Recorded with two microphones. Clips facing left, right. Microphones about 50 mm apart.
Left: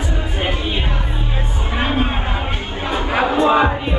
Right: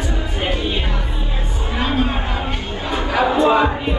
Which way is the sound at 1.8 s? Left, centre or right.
Left.